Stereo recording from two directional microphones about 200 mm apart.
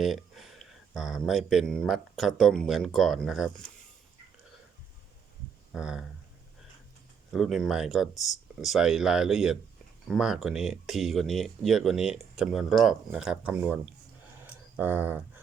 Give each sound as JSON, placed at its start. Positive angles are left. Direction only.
{"t": 0.0, "sound": "speech", "side_deg": 0}
{"t": 5.7, "sound": "speech", "side_deg": -5}
{"t": 7.3, "sound": "speech", "side_deg": 0}
{"t": 14.4, "sound": "a sound", "side_deg": -10}